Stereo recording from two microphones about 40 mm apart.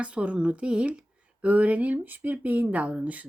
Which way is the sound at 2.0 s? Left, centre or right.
Right.